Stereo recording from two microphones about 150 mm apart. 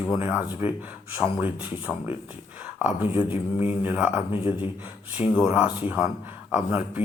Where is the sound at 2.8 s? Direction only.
15° right (ahead or behind).